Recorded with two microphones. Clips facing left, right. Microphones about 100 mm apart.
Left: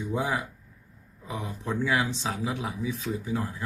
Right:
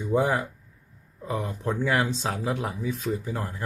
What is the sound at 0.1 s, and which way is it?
Speech, 50° right (ahead or behind).